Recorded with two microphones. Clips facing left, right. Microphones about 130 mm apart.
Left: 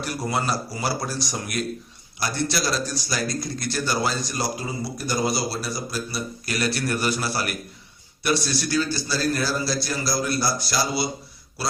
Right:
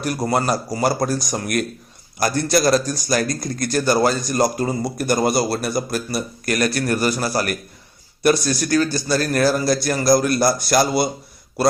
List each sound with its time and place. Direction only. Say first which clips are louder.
0.0 s speech: right 6 dB; 45° right (ahead or behind)